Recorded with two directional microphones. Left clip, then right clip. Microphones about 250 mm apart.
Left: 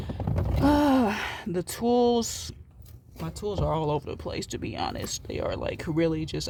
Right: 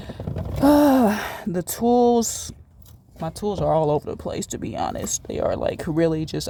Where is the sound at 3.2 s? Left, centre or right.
Right.